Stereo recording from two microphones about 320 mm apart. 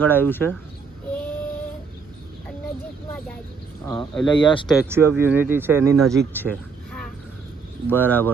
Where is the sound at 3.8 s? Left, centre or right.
Centre.